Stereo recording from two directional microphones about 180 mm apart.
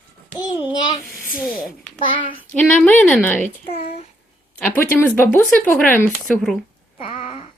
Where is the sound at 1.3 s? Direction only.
Centre (ahead or behind).